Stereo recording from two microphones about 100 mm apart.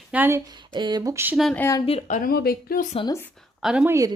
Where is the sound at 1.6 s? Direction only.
20° left (ahead or behind).